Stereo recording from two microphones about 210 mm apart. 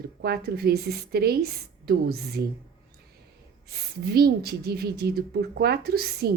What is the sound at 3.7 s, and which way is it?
A woman's voice, 50° right (ahead or behind).